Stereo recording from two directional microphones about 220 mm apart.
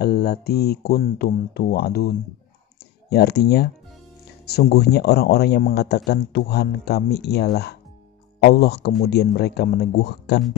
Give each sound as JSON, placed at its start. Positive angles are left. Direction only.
{"t": 0.0, "sound": "speech", "side_deg": 45}